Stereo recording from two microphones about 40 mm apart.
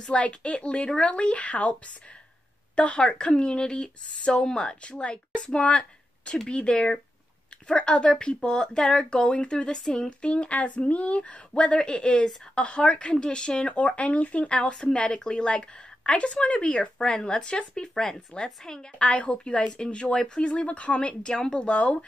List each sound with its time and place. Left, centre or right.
0.0 s speech: left
12.5 s speech: left
13.7 s speech: left; by 18.9 s centre
18.9 s speech: left
21.1 s speech: left